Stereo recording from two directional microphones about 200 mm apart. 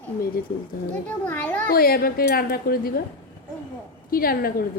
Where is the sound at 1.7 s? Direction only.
50° left (ahead or behind).